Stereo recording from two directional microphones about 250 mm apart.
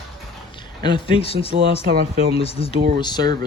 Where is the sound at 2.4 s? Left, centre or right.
Left.